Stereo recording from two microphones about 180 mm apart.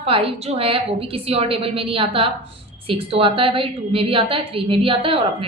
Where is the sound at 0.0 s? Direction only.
30° right (ahead or behind).